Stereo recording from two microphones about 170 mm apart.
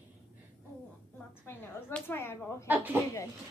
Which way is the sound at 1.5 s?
10° left (ahead or behind).